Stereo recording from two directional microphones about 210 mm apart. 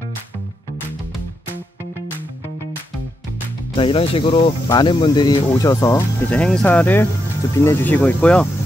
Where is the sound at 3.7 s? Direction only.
25° left (ahead or behind).